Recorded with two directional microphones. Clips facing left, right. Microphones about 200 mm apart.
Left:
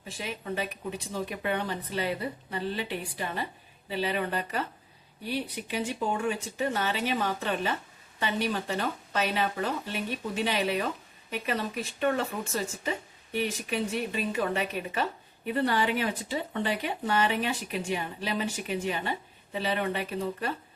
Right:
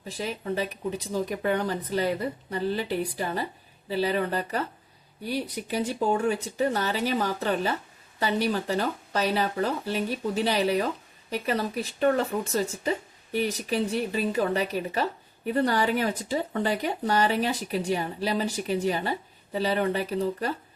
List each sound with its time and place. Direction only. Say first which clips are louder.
0.1 s speech: right 4 dB; 35° right (ahead or behind)